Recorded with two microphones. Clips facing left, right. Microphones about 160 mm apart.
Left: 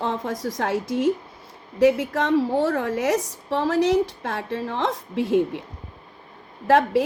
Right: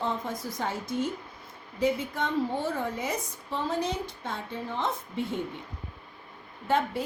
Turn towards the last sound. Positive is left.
turn(degrees=90)